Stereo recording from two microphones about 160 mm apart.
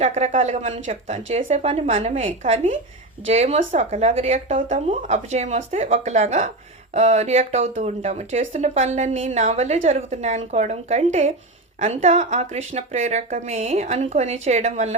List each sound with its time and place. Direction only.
0.0 s speech: 45° right (ahead or behind)